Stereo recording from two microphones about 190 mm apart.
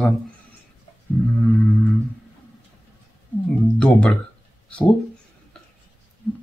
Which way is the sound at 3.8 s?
5° left (ahead or behind).